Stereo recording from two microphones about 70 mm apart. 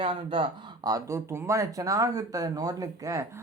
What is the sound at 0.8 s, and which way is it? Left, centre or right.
Speech, right.